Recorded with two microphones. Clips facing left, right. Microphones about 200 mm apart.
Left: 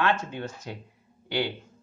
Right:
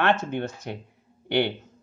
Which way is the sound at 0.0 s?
60° right (ahead or behind).